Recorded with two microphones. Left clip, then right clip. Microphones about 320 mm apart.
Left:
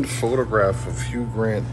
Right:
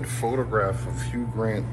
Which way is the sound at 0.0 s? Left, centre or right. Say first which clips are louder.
Left 5 dB; left.